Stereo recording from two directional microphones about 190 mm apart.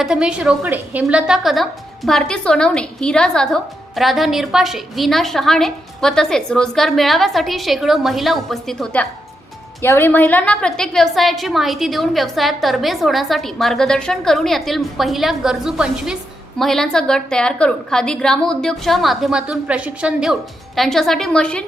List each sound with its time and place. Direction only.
0.0 s a woman's voice: 5° right (ahead or behind)